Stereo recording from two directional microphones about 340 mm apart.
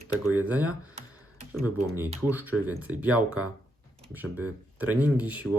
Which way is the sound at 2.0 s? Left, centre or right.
Centre.